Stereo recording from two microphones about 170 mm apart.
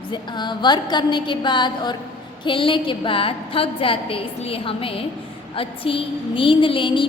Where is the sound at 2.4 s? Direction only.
30° left (ahead or behind).